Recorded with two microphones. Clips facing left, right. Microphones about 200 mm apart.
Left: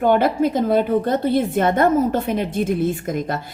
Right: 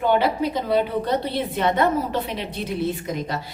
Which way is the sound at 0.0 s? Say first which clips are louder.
Left 4 dB; 50° left (ahead or behind).